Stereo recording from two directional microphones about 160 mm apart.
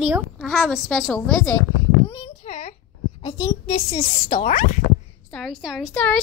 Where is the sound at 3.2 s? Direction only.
25° left (ahead or behind).